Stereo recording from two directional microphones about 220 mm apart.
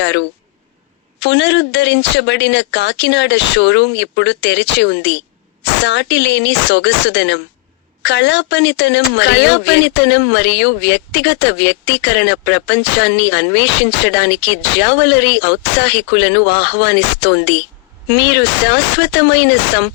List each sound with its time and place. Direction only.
0.0 s speech: 55° left (ahead or behind)